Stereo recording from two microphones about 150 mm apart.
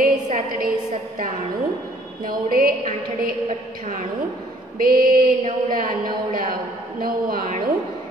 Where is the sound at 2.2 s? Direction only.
70° right (ahead or behind).